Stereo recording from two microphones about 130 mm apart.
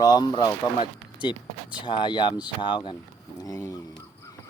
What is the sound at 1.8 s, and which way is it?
Speech, 35° left (ahead or behind).